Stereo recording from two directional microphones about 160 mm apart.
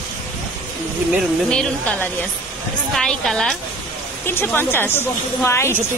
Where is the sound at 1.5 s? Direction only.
10° left (ahead or behind).